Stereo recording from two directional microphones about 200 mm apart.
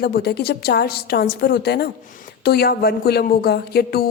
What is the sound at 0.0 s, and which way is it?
Speech, 50° left (ahead or behind).